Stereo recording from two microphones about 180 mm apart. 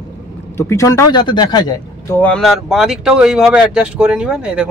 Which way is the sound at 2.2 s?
5° left (ahead or behind).